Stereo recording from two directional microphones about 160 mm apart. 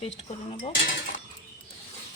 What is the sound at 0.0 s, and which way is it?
Cutlery, 40° left (ahead or behind).